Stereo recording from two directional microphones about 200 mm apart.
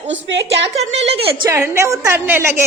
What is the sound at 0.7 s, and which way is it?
Speech, 30° right (ahead or behind).